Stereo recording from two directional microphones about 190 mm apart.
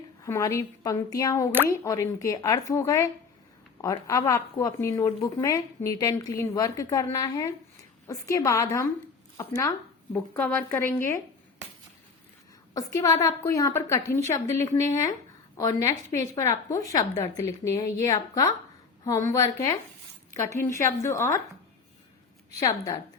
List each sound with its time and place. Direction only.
0.2 s speech: 15° left (ahead or behind)
12.7 s a woman's voice: 20° left (ahead or behind)